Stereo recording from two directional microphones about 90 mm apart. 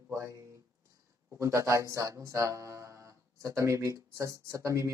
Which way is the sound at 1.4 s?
35° right (ahead or behind).